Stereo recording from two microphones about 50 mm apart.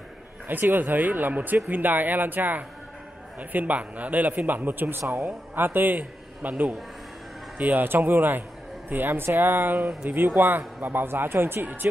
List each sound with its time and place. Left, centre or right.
0.5 s a man's voice: right
7.5 s a man's voice: right